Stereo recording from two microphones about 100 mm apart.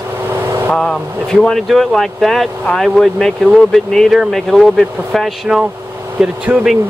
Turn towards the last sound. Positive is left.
turn(degrees=-15)  # may be behind; listen again after turning